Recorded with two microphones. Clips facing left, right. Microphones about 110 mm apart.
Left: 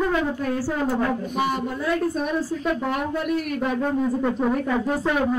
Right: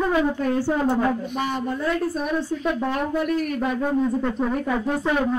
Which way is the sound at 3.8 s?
5° left (ahead or behind).